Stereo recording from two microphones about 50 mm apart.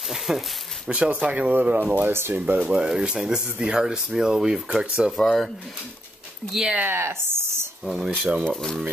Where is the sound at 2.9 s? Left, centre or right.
Centre.